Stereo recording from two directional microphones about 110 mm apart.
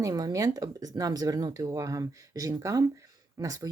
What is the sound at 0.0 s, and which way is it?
Speech, 35° right (ahead or behind).